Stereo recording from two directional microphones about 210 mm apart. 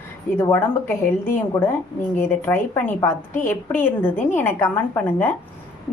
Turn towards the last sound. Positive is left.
turn(degrees=10)  # may be behind; listen again after turning